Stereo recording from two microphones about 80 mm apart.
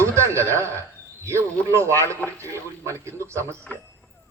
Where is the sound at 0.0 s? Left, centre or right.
Right.